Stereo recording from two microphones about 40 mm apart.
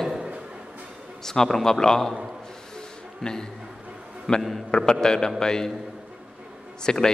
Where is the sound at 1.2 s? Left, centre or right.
Centre.